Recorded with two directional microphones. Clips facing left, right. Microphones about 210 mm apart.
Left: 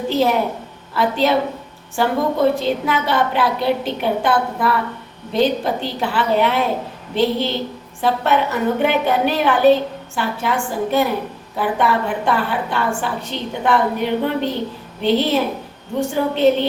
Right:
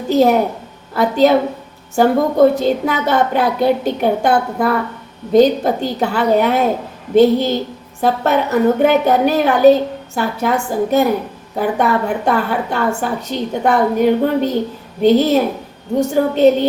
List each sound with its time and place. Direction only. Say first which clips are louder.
0.1 s a woman's voice: right 6 dB; 45° right (ahead or behind)